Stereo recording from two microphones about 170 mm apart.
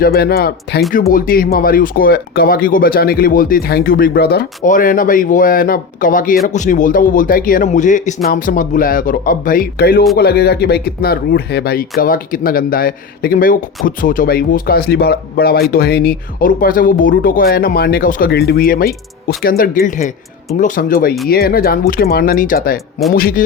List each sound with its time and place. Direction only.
0.0 s speech: 65° left (ahead or behind)
0.9 s a man's voice: 55° left (ahead or behind)